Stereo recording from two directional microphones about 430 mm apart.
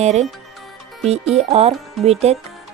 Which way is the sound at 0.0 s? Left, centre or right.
Centre.